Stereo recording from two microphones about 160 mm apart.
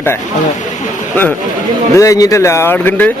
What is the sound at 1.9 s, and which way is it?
Speech, 20° left (ahead or behind).